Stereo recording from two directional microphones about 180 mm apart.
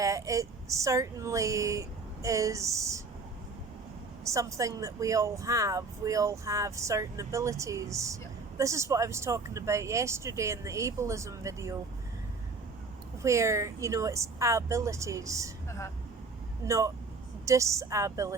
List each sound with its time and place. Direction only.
0.0 s speech: 15° right (ahead or behind)
4.2 s speech: 15° right (ahead or behind)
13.2 s speech: 15° right (ahead or behind)
16.6 s speech: 15° right (ahead or behind)